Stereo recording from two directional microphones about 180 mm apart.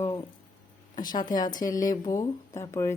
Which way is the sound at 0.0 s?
25° left (ahead or behind).